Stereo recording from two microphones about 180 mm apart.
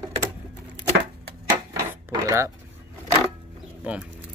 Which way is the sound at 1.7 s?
15° right (ahead or behind).